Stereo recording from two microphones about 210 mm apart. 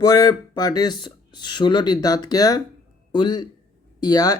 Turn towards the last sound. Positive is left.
turn(degrees=20)  # may be behind; listen again after turning